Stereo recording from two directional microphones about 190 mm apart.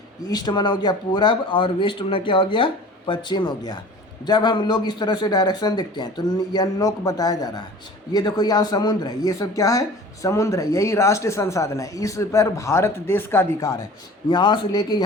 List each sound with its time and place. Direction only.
0.3 s a man's voice: 20° left (ahead or behind)